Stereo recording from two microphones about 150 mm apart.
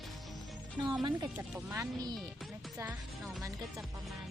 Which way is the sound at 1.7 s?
25° right (ahead or behind).